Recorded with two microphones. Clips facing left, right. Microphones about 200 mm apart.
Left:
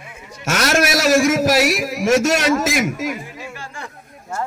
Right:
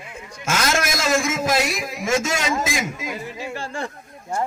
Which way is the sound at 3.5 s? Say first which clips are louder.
Right 5 dB; 30° right (ahead or behind).